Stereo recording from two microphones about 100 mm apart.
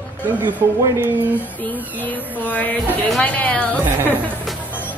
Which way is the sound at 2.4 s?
15° left (ahead or behind).